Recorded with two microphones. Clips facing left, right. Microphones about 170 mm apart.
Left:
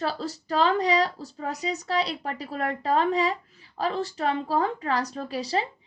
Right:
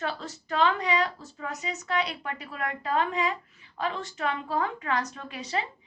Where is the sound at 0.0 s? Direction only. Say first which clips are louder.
Left 4 dB; 35° left (ahead or behind).